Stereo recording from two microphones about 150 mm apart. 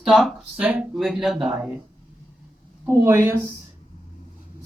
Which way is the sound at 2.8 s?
15° right (ahead or behind).